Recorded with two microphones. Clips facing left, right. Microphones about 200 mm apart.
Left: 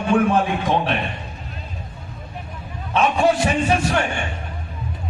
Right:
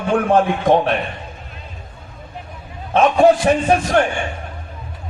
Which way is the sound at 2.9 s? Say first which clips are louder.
Right 5 dB; 55° right (ahead or behind).